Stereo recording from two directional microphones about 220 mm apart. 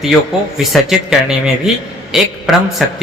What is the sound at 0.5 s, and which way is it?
A man's voice, centre (ahead or behind).